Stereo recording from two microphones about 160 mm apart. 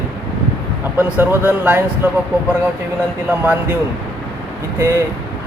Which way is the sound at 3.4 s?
10° right (ahead or behind).